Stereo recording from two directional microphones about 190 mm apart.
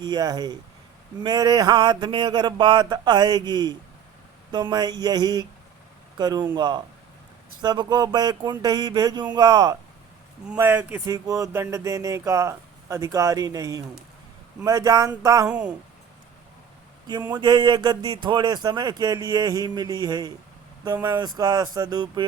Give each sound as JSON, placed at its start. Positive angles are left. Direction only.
{"t": 0.0, "sound": "speech", "side_deg": -20}
{"t": 10.4, "sound": "speech", "side_deg": -10}
{"t": 15.4, "sound": "speech", "side_deg": -5}
{"t": 17.3, "sound": "speech", "side_deg": -25}